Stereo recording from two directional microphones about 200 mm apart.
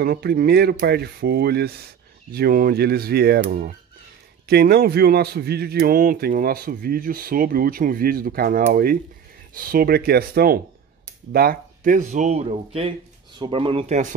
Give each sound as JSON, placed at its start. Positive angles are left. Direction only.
{"t": 0.0, "sound": "a man's voice", "side_deg": -50}
{"t": 4.5, "sound": "a man's voice", "side_deg": -50}